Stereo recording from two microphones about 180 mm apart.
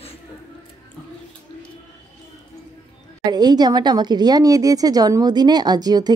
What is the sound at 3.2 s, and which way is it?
A woman's voice, 20° right (ahead or behind).